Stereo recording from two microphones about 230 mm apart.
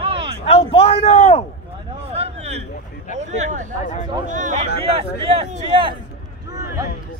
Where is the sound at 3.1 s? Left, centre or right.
Right.